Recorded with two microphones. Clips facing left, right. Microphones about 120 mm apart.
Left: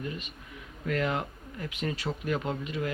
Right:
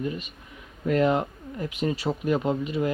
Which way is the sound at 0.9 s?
25° right (ahead or behind).